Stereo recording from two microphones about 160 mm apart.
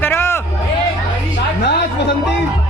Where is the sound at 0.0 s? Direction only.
15° left (ahead or behind).